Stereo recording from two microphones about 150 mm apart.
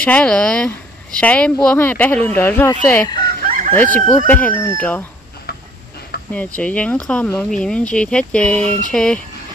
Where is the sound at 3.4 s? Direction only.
65° right (ahead or behind).